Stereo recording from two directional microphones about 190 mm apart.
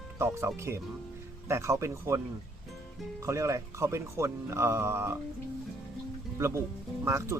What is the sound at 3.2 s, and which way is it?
Speech, 15° right (ahead or behind).